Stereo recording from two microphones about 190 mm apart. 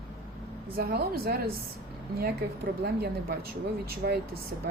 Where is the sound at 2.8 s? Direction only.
55° right (ahead or behind).